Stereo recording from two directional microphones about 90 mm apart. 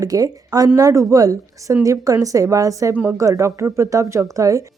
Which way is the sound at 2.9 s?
20° right (ahead or behind).